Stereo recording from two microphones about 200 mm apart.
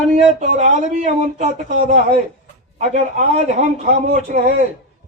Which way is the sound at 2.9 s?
35° right (ahead or behind).